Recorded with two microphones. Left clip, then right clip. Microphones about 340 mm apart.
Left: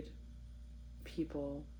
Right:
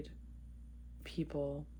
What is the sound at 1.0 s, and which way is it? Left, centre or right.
Speech, right.